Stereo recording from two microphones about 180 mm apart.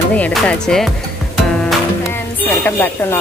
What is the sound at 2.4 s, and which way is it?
Speech, 10° left (ahead or behind).